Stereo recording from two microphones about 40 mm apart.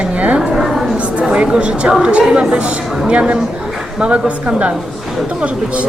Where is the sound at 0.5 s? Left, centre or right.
Centre.